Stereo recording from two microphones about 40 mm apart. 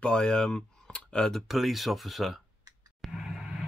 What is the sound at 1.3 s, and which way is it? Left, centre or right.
Speech, centre.